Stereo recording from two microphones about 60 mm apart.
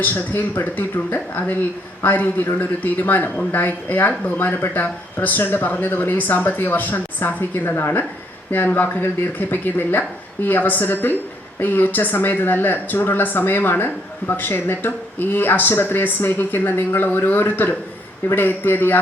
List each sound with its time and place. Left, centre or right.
0.0 s speech: left